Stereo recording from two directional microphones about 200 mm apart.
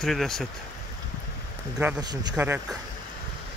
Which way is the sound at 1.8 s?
10° right (ahead or behind).